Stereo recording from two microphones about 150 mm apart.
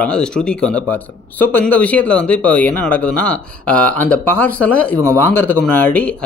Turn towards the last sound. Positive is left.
turn(degrees=10)  # may be behind; listen again after turning